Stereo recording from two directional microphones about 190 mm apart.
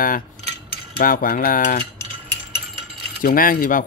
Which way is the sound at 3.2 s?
45° left (ahead or behind).